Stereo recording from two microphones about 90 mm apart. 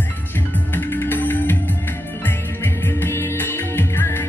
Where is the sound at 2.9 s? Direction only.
25° left (ahead or behind).